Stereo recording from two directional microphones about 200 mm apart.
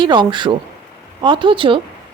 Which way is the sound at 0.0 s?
25° right (ahead or behind).